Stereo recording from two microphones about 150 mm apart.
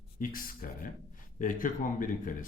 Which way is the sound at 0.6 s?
70° left (ahead or behind).